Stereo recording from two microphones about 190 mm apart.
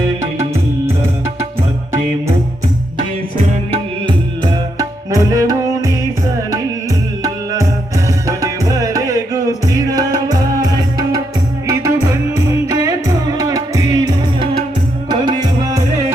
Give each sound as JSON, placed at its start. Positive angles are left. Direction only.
{"t": 4.8, "sound": "music", "side_deg": -20}
{"t": 7.2, "sound": "music", "side_deg": -20}